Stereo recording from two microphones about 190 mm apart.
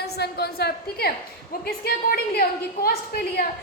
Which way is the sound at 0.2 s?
55° left (ahead or behind).